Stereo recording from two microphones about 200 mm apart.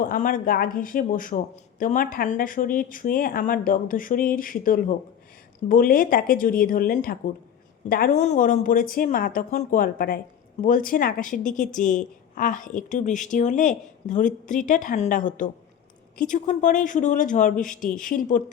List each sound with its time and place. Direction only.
0.0 s a woman's voice: 40° left (ahead or behind)